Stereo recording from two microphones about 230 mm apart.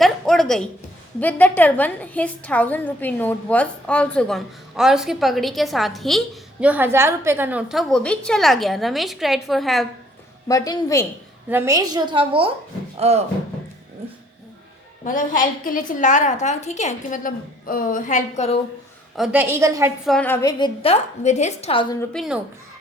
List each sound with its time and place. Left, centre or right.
0.0 s a woman's voice: centre
10.5 s a woman's voice: centre
11.4 s a woman's voice: centre; by 13.2 s right
15.0 s a woman's voice: left
19.1 s a woman's voice: centre
20.1 s a woman's voice: centre; by 21.9 s left
22.1 s a woman's voice: centre